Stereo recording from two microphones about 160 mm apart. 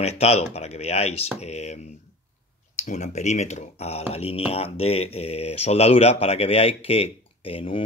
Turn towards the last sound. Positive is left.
turn(degrees=35)  # may be behind; listen again after turning